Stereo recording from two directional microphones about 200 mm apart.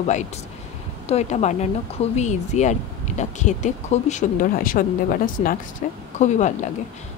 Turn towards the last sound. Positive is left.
turn(degrees=35)  # may be behind; listen again after turning